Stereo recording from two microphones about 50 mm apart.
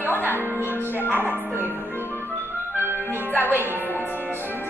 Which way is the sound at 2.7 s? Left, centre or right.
Right.